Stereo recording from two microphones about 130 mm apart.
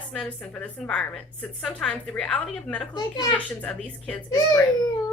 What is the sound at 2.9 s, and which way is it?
Speech, 30° left (ahead or behind).